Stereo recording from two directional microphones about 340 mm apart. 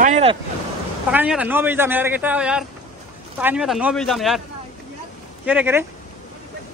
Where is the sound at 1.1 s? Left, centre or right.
Centre.